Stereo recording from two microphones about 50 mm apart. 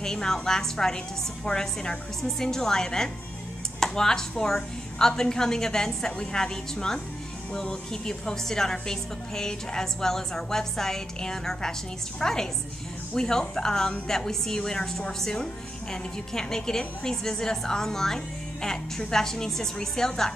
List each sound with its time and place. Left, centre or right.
0.0 s a woman's voice: centre